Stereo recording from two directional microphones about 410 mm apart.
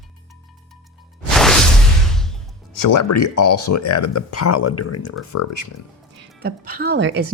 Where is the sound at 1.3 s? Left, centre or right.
Centre.